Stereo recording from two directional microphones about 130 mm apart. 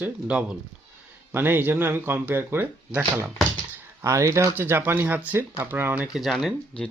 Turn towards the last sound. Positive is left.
turn(degrees=5)  # may be behind; listen again after turning